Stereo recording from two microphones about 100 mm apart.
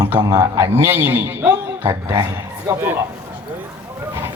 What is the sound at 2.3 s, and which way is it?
Speech, 35° right (ahead or behind).